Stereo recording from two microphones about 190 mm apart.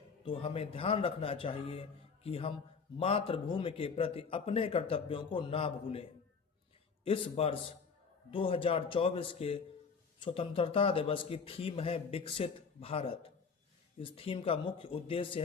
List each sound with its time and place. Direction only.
0.2 s a man's voice: 30° left (ahead or behind)